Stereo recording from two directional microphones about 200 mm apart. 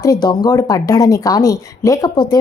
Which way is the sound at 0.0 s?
20° left (ahead or behind).